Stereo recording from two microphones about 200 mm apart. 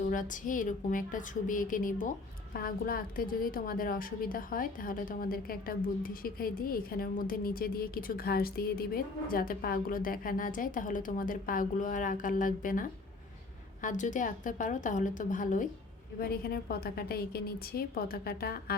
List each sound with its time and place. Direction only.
0.1 s a woman's voice: 40° left (ahead or behind)